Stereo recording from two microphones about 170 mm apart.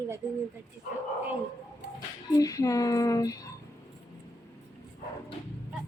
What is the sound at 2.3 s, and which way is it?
Speech, 20° left (ahead or behind).